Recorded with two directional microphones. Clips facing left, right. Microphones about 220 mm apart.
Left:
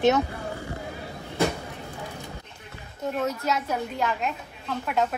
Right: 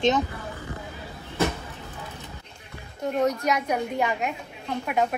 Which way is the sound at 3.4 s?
15° right (ahead or behind).